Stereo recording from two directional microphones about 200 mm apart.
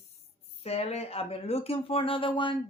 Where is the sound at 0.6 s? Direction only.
30° left (ahead or behind).